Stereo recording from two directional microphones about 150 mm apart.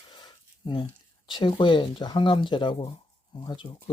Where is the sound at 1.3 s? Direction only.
30° left (ahead or behind).